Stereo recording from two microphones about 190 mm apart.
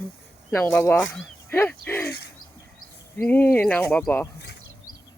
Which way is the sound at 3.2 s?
10° left (ahead or behind).